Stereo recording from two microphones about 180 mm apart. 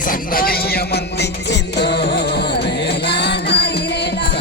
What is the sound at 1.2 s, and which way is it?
Music, 70° left (ahead or behind).